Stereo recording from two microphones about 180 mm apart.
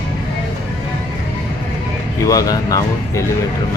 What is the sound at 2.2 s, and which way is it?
Speech, 20° left (ahead or behind).